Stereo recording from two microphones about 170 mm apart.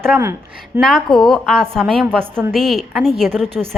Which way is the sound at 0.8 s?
Centre (ahead or behind).